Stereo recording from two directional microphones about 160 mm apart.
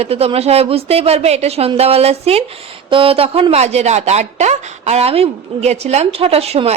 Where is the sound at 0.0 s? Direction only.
40° right (ahead or behind).